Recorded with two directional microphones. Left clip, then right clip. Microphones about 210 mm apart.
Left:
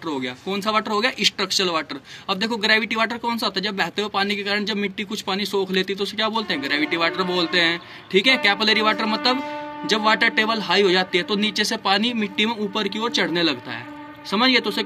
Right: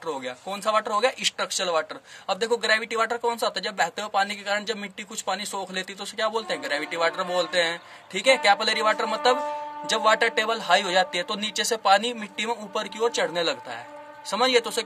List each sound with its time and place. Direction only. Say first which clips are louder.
0.0 s a man's voice: left 4 dB; 40° right (ahead or behind)